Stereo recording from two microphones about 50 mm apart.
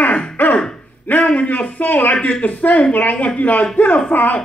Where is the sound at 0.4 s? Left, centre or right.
Left.